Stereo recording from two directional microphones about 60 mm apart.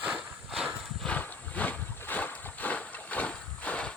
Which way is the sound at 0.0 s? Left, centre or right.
Centre.